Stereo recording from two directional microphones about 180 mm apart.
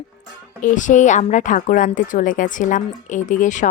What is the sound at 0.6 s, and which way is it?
A woman's voice, 45° left (ahead or behind).